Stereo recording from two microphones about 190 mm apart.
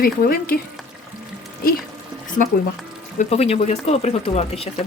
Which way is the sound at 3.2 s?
35° left (ahead or behind).